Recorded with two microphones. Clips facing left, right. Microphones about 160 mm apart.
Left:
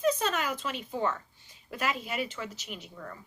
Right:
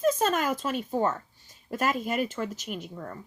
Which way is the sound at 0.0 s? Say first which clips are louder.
Right 4 dB; 45° right (ahead or behind).